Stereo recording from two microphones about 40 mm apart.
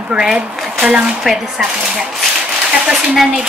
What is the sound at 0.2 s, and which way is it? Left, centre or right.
Speech, centre.